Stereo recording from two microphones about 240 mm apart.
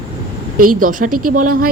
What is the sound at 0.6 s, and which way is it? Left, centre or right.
Speech, right.